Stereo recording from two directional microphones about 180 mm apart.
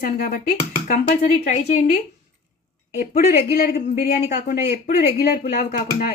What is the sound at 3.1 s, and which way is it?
Speech, 55° left (ahead or behind).